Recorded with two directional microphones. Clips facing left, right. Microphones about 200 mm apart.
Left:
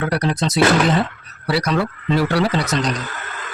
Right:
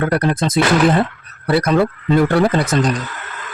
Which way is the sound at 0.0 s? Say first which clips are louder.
Right 3 dB; 50° right (ahead or behind).